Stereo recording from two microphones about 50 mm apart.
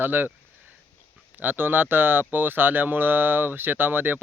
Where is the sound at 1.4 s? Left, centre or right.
Right.